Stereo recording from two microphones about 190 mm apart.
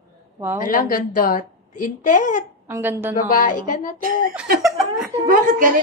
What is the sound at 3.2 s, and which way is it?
Speech, 45° left (ahead or behind).